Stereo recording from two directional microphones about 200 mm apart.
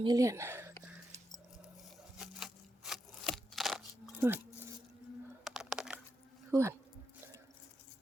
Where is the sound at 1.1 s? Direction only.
35° right (ahead or behind).